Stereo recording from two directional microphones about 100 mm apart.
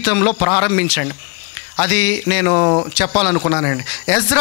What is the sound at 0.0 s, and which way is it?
A man's voice, 20° left (ahead or behind).